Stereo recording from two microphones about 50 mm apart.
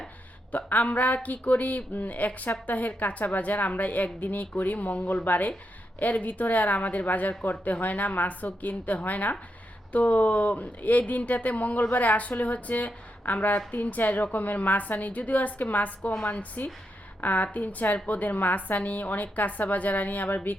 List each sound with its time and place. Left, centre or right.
0.5 s speech: left